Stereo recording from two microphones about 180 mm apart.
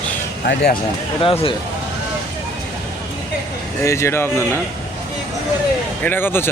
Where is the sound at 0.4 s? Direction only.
65° left (ahead or behind).